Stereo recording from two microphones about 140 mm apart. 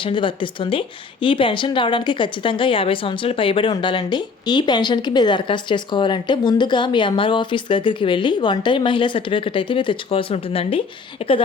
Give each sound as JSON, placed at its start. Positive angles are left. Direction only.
{"t": 0.0, "sound": "speech", "side_deg": 35}